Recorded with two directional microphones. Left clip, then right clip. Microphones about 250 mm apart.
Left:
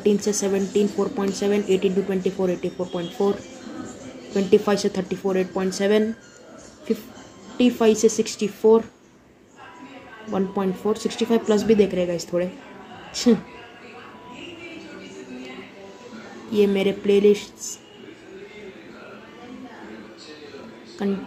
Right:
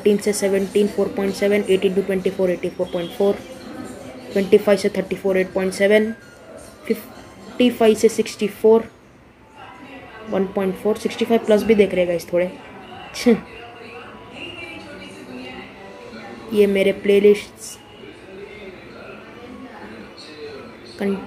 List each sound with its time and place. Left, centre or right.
0.0 s speech: centre
4.3 s speech: centre
7.5 s speech: centre
10.3 s speech: centre
16.5 s speech: centre